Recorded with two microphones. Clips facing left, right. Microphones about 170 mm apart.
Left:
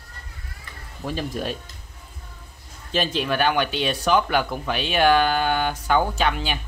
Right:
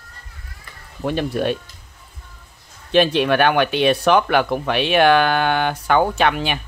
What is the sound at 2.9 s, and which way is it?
Speech, 70° right (ahead or behind).